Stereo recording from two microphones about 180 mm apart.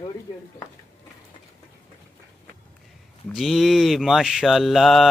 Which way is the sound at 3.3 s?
Centre (ahead or behind).